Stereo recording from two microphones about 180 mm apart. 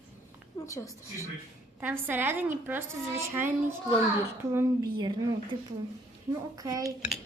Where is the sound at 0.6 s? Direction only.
15° left (ahead or behind).